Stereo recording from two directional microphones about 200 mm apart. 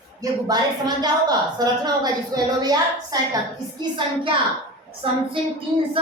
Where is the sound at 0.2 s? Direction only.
20° right (ahead or behind).